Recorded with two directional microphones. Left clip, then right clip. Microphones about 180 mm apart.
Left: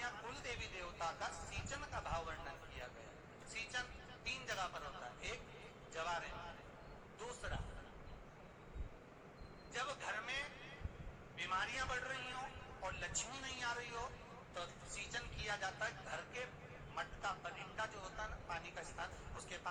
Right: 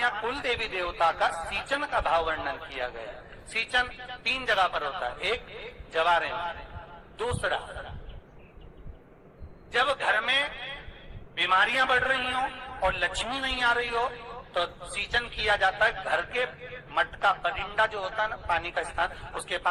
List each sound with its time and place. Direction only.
0.0 s a man's voice: 45° right (ahead or behind)
9.7 s a man's voice: 45° right (ahead or behind)